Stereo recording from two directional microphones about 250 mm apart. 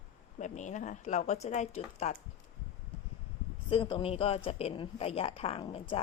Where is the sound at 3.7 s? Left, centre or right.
Centre.